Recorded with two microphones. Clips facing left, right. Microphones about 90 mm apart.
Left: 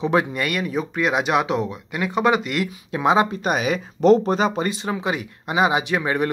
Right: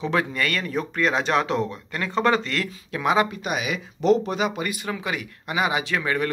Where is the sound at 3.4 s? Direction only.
40° left (ahead or behind).